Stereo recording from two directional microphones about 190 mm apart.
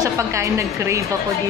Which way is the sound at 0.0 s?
15° right (ahead or behind).